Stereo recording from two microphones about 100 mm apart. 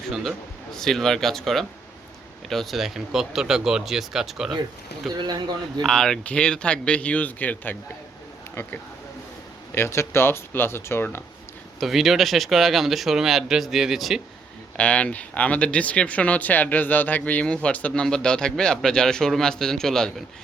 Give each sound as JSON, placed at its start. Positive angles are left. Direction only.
{"t": 0.1, "sound": "speech", "side_deg": 0}
{"t": 5.1, "sound": "speech", "side_deg": -45}
{"t": 5.8, "sound": "speech", "side_deg": 5}
{"t": 9.7, "sound": "speech", "side_deg": 25}
{"t": 11.8, "sound": "speech", "side_deg": 0}
{"t": 14.8, "sound": "speech", "side_deg": 15}